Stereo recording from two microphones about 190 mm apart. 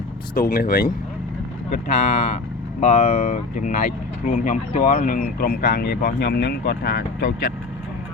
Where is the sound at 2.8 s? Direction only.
35° left (ahead or behind); by 6.7 s 60° left (ahead or behind).